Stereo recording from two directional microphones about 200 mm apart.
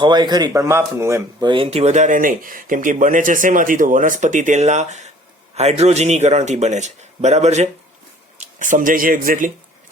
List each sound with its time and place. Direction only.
0.0 s speech: 20° right (ahead or behind); by 9.5 s 45° right (ahead or behind)